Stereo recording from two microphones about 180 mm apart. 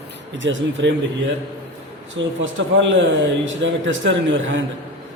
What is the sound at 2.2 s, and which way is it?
A man's voice, 90° right.